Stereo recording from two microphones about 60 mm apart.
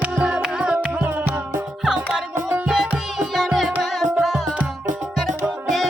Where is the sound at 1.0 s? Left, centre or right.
Right.